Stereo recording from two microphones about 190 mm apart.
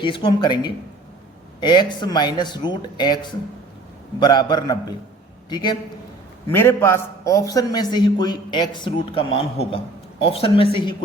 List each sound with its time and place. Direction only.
0.0 s a man's voice: 25° left (ahead or behind)
6.5 s a man's voice: 10° left (ahead or behind)